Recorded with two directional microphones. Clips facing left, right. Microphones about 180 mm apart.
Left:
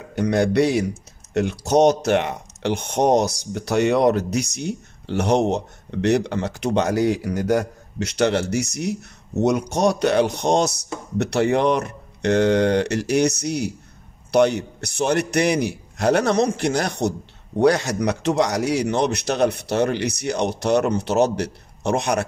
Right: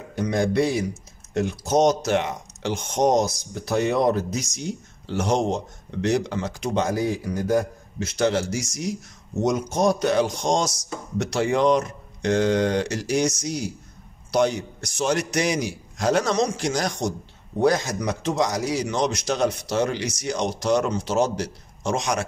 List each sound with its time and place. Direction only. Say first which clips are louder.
0.1 s speech: left 4 dB; 70° left (ahead or behind)